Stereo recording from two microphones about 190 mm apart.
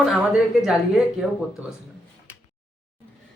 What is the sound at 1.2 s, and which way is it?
Speech, centre (ahead or behind).